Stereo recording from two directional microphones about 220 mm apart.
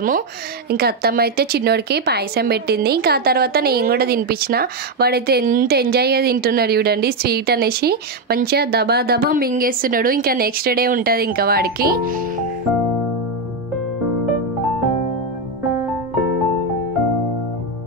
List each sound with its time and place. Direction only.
0.7 s speech: 45° right (ahead or behind)